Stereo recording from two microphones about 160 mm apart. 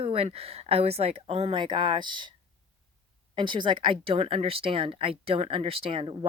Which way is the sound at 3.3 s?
30° right (ahead or behind).